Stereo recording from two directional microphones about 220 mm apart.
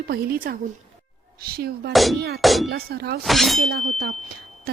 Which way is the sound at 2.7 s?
45° right (ahead or behind).